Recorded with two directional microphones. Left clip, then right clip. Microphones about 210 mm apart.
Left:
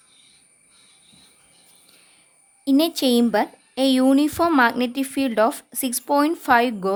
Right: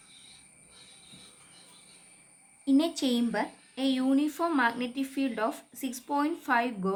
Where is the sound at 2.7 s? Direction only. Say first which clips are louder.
Left 8 dB; 50° left (ahead or behind).